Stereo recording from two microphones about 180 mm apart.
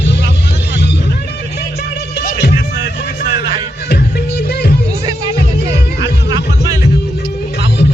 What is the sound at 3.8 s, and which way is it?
Music, 60° left (ahead or behind).